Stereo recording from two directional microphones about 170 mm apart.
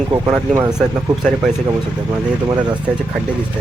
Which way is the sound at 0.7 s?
5° right (ahead or behind).